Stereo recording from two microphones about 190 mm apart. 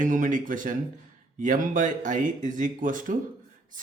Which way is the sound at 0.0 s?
45° right (ahead or behind).